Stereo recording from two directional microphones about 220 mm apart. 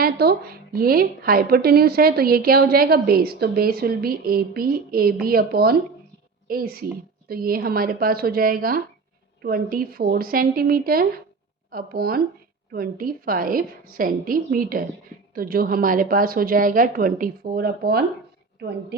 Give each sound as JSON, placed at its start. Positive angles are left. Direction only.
{"t": 0.0, "sound": "a woman's voice", "side_deg": -45}